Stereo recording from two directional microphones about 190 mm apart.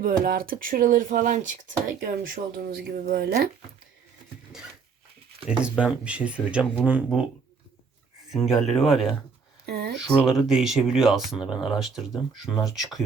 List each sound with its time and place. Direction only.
0.0 s speech: 50° right (ahead or behind)
5.5 s speech: 5° right (ahead or behind)
8.3 s speech: centre (ahead or behind)
9.6 s a sound: 55° right (ahead or behind)
9.9 s speech: centre (ahead or behind)